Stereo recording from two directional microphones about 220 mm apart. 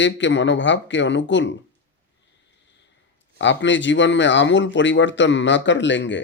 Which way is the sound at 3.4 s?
55° left (ahead or behind).